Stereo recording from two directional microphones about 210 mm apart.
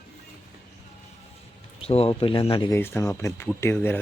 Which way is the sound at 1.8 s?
30° left (ahead or behind).